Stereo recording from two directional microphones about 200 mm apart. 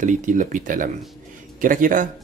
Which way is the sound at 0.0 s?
40° right (ahead or behind).